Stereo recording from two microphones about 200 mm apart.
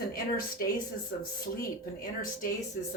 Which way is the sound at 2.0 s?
45° left (ahead or behind).